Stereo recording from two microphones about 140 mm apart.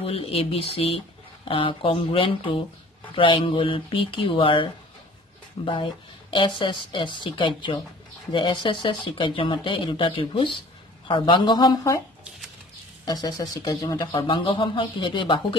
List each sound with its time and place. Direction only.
0.0 s speech: 45° left (ahead or behind)
5.7 s speech: 35° left (ahead or behind)
13.0 s speech: 30° left (ahead or behind)